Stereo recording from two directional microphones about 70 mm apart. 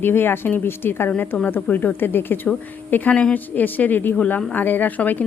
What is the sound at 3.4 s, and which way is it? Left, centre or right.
Speech, left.